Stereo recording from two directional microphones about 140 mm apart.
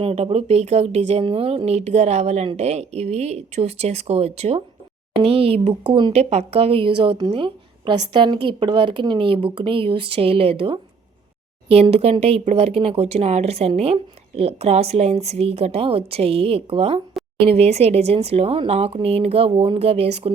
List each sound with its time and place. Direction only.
0.0 s a woman's voice: 45° right (ahead or behind)